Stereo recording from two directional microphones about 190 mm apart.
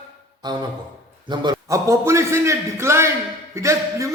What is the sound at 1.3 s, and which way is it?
A man's voice, 20° right (ahead or behind).